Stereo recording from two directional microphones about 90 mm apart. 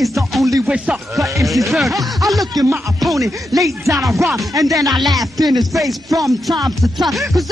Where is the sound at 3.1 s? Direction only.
40° right (ahead or behind).